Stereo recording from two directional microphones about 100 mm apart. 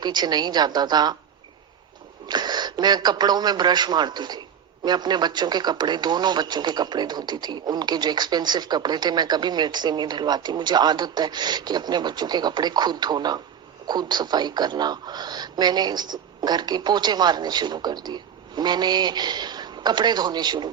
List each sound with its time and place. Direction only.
0.0 s speech: 45° right (ahead or behind)
2.2 s speech: 45° right (ahead or behind)